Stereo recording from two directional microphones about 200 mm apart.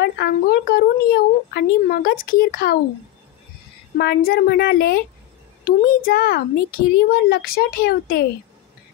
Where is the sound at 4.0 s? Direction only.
50° left (ahead or behind).